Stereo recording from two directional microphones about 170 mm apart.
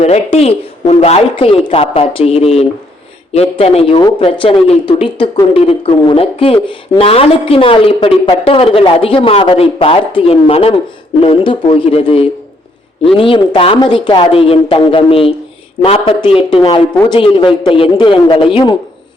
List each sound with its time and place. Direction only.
0.0 s a man's voice: 40° left (ahead or behind)